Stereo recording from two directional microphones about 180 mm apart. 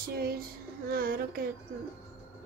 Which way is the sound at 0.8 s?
55° right (ahead or behind).